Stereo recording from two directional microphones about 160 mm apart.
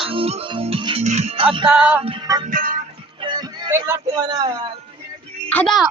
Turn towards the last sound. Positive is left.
turn(degrees=0)  # may be behind; listen again after turning